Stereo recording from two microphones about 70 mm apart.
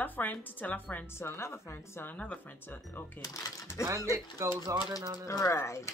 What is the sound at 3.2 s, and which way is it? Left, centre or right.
Speech, left.